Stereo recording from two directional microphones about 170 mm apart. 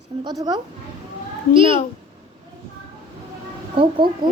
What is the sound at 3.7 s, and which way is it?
Speech, 30° right (ahead or behind).